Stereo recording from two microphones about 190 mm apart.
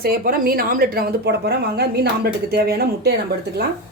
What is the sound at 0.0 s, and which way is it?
Speech, 55° right (ahead or behind).